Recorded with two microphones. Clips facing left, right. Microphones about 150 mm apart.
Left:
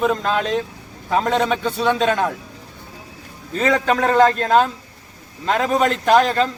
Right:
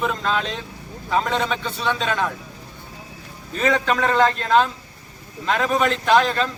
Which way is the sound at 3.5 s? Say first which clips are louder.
Left 2 dB; 40° left (ahead or behind).